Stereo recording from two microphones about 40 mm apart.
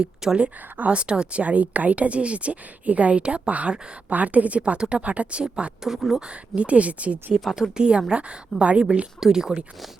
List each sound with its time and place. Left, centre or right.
0.2 s speech: centre
0.9 s speech: right
1.4 s speech: right
5.8 s speech: centre
6.6 s speech: right
7.8 s speech: right
9.2 s speech: centre